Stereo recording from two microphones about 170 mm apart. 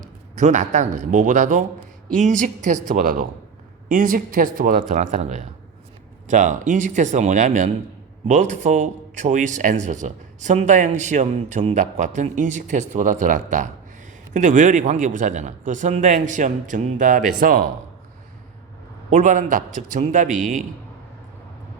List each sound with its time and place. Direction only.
0.0 s a man's voice: 45° right (ahead or behind)
19.1 s a man's voice: 50° right (ahead or behind)